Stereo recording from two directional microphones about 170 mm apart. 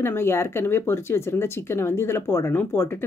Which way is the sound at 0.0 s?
15° left (ahead or behind).